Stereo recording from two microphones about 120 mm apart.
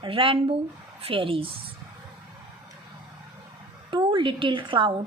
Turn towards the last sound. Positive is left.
turn(degrees=-45)  # may be behind; listen again after turning